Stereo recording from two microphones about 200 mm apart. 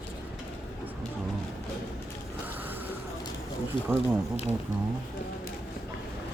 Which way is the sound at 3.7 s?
25° left (ahead or behind).